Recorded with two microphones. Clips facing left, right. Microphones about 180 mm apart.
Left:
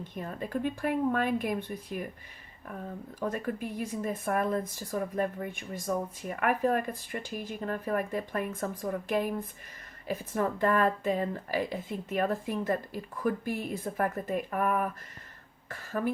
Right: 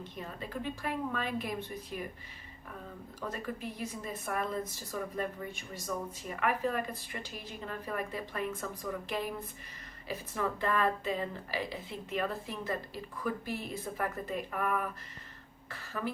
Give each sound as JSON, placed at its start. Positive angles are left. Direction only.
{"t": 0.0, "sound": "speech", "side_deg": 50}
{"t": 3.2, "sound": "speech", "side_deg": 50}